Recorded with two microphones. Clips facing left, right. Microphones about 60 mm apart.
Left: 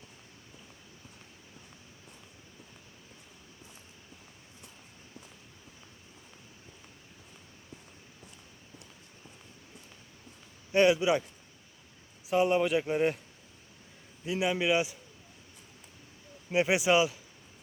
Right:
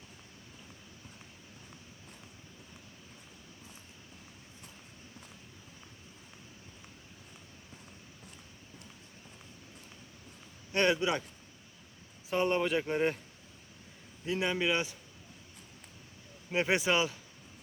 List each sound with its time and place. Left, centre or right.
10.7 s speech: centre
12.3 s speech: centre
14.3 s speech: centre
16.5 s speech: centre